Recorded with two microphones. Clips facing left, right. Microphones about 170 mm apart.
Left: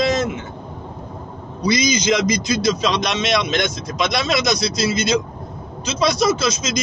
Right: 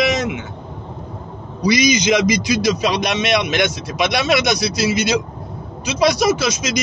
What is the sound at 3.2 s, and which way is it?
A man's voice, 65° right (ahead or behind).